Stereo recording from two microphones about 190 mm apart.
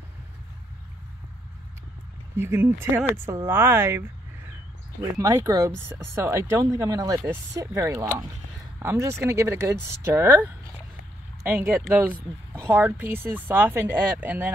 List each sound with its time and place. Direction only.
2.3 s speech: 15° right (ahead or behind)
5.1 s speech: 15° right (ahead or behind)